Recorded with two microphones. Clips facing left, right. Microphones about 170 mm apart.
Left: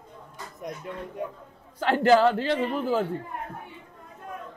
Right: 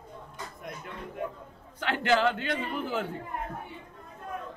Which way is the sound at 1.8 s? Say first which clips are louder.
Left 7 dB; 40° left (ahead or behind).